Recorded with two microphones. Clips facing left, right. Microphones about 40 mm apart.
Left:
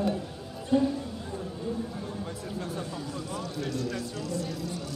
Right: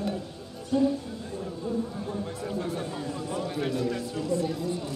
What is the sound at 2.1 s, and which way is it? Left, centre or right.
A man's voice, centre.